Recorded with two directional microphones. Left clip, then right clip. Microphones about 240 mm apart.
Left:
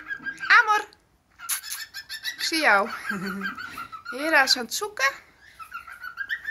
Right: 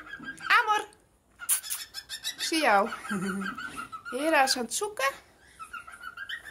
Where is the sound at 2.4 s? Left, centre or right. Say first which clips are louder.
Left 3 dB; centre.